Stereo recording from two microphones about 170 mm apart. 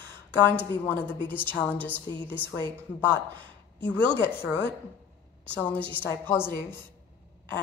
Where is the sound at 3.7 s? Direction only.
10° left (ahead or behind).